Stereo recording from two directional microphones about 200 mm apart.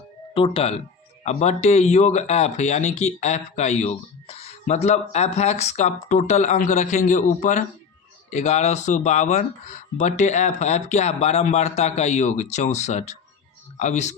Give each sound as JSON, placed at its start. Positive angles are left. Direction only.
{"t": 0.3, "sound": "speech", "side_deg": 30}